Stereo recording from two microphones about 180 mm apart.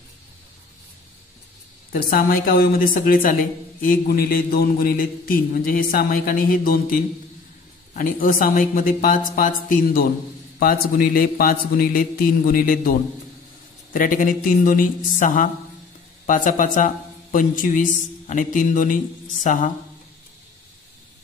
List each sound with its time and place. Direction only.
1.9 s a woman's voice: 55° left (ahead or behind)
13.9 s a woman's voice: 50° left (ahead or behind)